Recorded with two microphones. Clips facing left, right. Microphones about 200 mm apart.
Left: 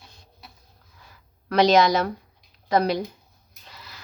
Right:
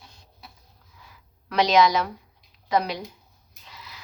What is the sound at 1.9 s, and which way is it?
Speech, 50° left (ahead or behind).